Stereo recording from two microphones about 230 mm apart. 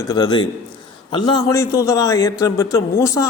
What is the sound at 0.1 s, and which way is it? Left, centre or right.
A man's voice, centre.